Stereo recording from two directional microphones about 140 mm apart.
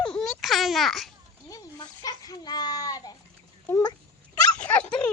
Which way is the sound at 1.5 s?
25° left (ahead or behind).